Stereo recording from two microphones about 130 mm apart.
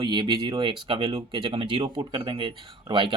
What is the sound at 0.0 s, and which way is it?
Speech, 35° right (ahead or behind).